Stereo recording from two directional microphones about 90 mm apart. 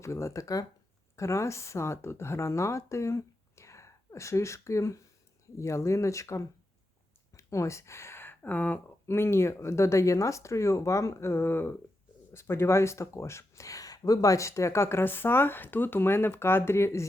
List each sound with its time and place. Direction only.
0.0 s speech: 30° left (ahead or behind)
9.0 s speech: 30° left (ahead or behind)